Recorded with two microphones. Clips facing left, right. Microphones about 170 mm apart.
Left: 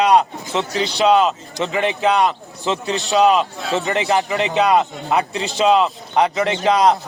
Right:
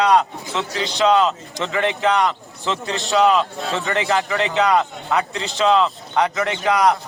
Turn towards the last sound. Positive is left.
turn(degrees=25)  # may be behind; listen again after turning